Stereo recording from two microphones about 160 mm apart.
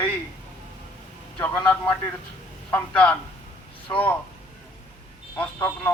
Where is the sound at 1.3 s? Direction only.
15° left (ahead or behind).